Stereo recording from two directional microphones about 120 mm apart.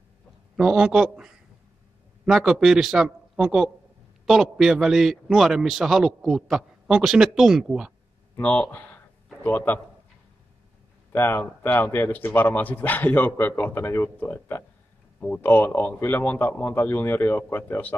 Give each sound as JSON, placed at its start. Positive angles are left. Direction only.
{"t": 0.6, "sound": "a man's voice", "side_deg": -5}
{"t": 8.4, "sound": "speech", "side_deg": 15}
{"t": 11.1, "sound": "speech", "side_deg": 20}